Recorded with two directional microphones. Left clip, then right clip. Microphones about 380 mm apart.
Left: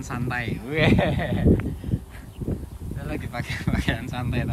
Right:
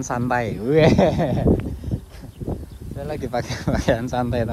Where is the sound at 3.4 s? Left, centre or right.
Centre.